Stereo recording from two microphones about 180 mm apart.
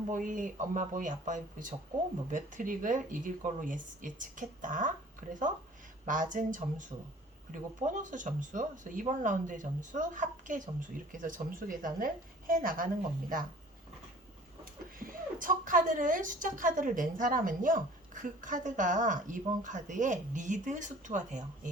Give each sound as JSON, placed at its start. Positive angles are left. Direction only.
{"t": 0.1, "sound": "a woman's voice", "side_deg": -45}
{"t": 14.6, "sound": "a woman's voice", "side_deg": -50}